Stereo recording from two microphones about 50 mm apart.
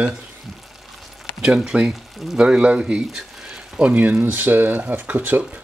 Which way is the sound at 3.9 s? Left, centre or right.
Right.